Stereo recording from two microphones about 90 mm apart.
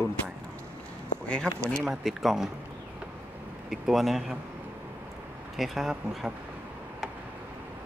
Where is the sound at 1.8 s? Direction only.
Centre (ahead or behind).